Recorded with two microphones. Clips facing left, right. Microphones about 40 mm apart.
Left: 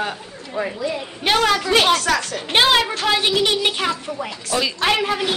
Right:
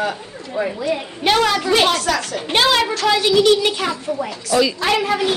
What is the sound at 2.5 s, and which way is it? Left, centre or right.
A woman's voice, centre.